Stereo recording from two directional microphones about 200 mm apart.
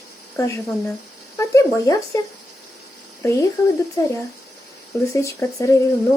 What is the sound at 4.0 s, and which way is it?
Speech, 15° left (ahead or behind).